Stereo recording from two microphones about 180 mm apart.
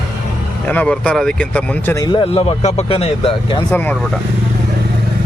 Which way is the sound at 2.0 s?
30° left (ahead or behind).